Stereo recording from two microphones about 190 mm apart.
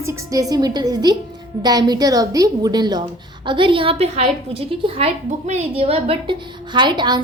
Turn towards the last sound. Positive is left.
turn(degrees=-25)  # may be behind; listen again after turning